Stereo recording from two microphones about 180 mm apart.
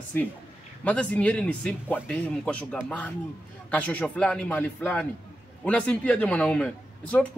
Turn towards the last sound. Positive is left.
turn(degrees=5)  # may be behind; listen again after turning